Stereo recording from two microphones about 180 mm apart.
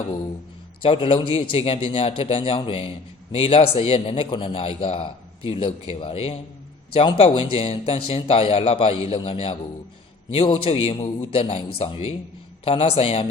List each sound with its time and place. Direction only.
0.8 s a man's voice: 30° left (ahead or behind)